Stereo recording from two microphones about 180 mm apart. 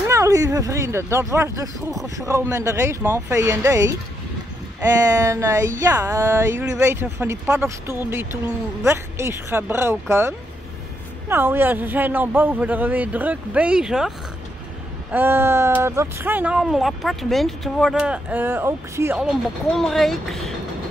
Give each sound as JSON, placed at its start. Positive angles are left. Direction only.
{"t": 0.1, "sound": "a sound", "side_deg": -15}
{"t": 0.5, "sound": "speech", "side_deg": -15}
{"t": 19.2, "sound": "speech", "side_deg": 0}